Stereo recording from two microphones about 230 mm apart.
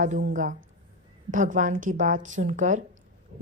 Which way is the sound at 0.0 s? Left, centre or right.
Right.